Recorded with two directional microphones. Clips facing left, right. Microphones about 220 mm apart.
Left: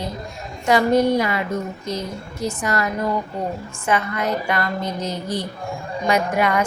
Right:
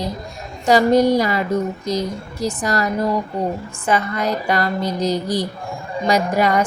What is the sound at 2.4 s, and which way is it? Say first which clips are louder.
Speech: right 2 dB; 35° right (ahead or behind).